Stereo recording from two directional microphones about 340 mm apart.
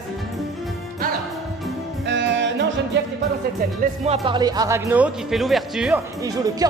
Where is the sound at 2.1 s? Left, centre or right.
Right.